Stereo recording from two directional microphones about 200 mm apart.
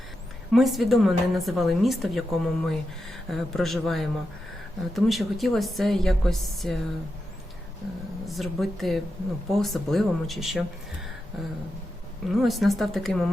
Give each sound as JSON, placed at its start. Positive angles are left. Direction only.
{"t": 0.5, "sound": "speech", "side_deg": 0}
{"t": 8.3, "sound": "speech", "side_deg": 0}
{"t": 12.3, "sound": "speech", "side_deg": 0}